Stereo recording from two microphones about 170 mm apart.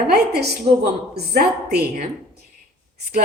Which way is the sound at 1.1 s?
70° right (ahead or behind).